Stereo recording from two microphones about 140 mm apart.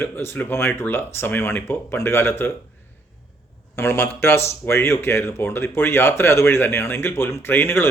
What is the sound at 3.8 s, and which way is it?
Speech, 15° left (ahead or behind).